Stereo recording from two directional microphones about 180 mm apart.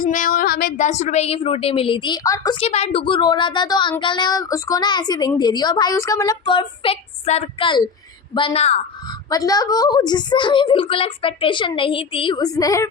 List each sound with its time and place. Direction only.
0.0 s a woman's voice: 50° left (ahead or behind); by 2.6 s 20° left (ahead or behind)
2.6 s a woman's voice: 35° left (ahead or behind)
9.0 s a woman's voice: 20° left (ahead or behind)